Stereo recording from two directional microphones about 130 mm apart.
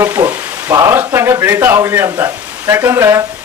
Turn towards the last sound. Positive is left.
turn(degrees=-20)  # may be behind; listen again after turning